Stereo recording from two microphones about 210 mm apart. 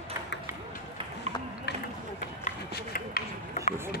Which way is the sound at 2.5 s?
45° left (ahead or behind).